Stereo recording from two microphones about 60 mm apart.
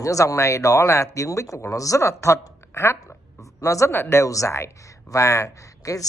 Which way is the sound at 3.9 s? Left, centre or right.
Left.